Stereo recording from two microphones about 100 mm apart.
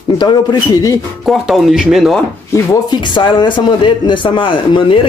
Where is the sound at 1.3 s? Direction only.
Centre (ahead or behind).